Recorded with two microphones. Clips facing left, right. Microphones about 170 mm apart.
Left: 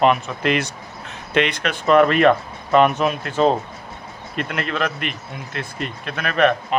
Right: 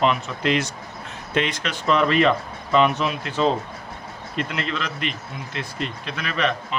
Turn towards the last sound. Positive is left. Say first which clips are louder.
# left 7 dB
turn(degrees=55)  # may be behind; listen again after turning